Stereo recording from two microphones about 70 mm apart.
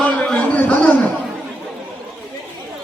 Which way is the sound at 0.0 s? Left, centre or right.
Centre.